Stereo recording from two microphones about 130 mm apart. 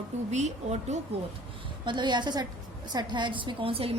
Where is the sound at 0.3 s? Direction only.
60° right (ahead or behind).